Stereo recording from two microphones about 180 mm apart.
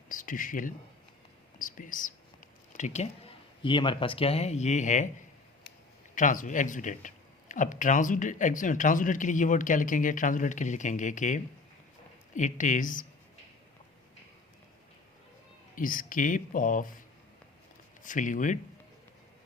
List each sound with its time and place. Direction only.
0.1 s speech: 50° left (ahead or behind)
6.1 s speech: 45° left (ahead or behind)
15.7 s speech: 50° left (ahead or behind)
18.0 s speech: 45° left (ahead or behind)